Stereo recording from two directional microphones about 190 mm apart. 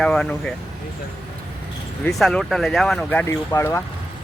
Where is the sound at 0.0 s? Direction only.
5° left (ahead or behind).